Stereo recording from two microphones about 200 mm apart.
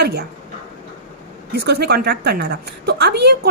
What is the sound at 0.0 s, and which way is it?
Speech, 55° right (ahead or behind).